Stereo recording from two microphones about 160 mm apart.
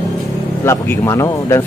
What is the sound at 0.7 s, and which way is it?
Speech, 15° left (ahead or behind).